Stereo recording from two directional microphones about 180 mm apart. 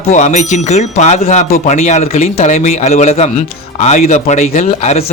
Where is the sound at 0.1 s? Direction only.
40° left (ahead or behind).